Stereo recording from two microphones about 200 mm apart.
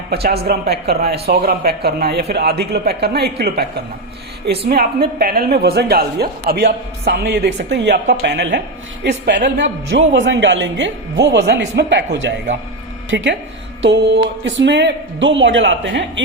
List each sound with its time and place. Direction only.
0.1 s speech: 55° right (ahead or behind)
4.7 s speech: 50° right (ahead or behind)
13.1 s speech: 65° right (ahead or behind)